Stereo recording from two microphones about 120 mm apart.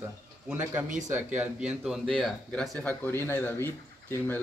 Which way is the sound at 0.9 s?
90° right.